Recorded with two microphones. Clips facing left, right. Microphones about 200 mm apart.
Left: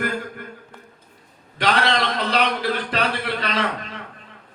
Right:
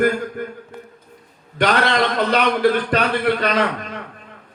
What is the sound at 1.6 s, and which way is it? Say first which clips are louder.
A man's voice: right 3 dB; 50° right (ahead or behind).